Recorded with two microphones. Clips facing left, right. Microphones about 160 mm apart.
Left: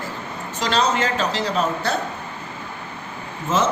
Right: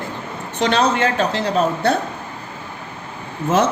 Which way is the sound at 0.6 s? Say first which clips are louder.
Right 4 dB; 55° right (ahead or behind).